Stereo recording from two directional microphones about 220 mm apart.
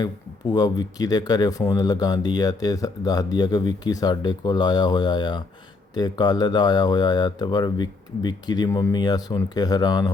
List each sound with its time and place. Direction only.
0.0 s speech: 20° left (ahead or behind)